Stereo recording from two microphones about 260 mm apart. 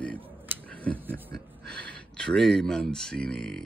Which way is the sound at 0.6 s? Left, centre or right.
Centre.